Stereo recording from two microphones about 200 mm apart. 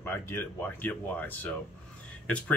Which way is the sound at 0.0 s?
10° left (ahead or behind).